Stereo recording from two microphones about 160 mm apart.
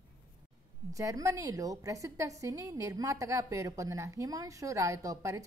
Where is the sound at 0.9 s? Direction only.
20° right (ahead or behind).